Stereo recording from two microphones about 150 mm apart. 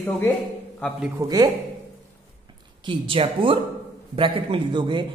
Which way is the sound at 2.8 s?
35° right (ahead or behind).